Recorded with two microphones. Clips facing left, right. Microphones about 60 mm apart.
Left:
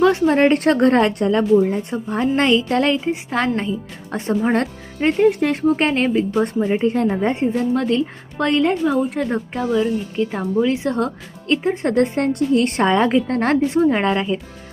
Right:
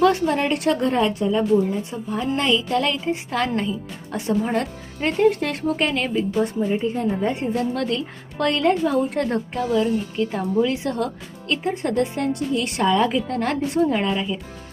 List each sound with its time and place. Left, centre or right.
0.0 s speech: left
0.3 s a woman's voice: left
1.9 s a woman's voice: left
4.1 s a woman's voice: left
4.9 s speech: left
6.3 s a woman's voice: left
7.3 s speech: left
9.0 s speech: centre
10.7 s speech: left
11.9 s a woman's voice: left
13.7 s speech: left
14.0 s a woman's voice: left